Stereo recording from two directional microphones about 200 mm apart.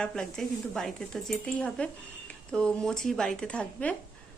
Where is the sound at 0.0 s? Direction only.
5° left (ahead or behind).